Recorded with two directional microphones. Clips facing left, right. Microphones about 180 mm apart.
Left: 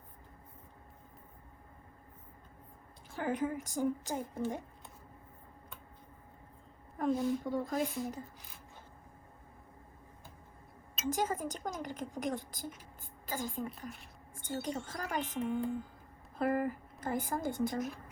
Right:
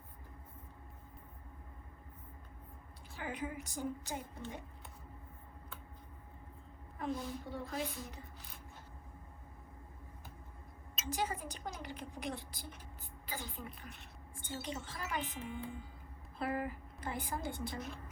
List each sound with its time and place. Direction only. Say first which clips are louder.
3.1 s speech: left 8 dB; 50° left (ahead or behind)
7.0 s speech: left 8 dB; 45° left (ahead or behind)
11.0 s speech: left 5 dB; 45° left (ahead or behind)
15.2 s speech: left 7 dB; centre (ahead or behind)
16.4 s speech: left 6 dB; 45° left (ahead or behind)